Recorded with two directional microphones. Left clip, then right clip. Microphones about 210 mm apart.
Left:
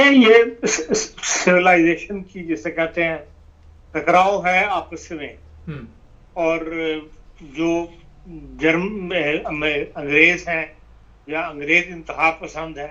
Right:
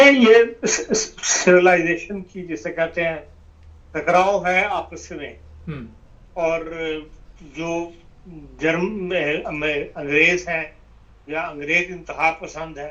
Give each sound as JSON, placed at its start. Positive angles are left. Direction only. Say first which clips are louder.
{"t": 0.0, "sound": "speech", "louder": "even", "side_deg": 15}